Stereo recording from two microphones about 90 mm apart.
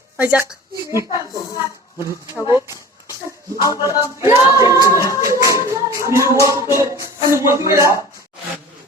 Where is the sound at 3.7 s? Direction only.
35° right (ahead or behind).